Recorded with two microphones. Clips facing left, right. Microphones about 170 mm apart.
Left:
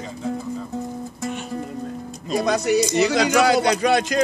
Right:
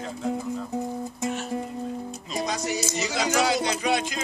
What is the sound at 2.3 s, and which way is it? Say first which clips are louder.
Music: left 9 dB; 65° left (ahead or behind).